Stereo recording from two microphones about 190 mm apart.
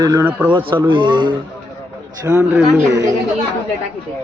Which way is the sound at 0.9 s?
25° right (ahead or behind).